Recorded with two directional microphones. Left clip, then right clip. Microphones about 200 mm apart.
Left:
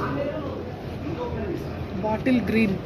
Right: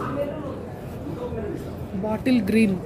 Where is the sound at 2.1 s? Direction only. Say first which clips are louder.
Right 1 dB; 50° right (ahead or behind).